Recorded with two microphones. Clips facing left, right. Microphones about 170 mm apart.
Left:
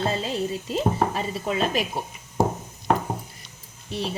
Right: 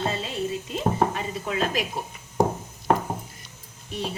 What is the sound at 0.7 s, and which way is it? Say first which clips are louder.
Chopping: left 1 dB; 30° left (ahead or behind).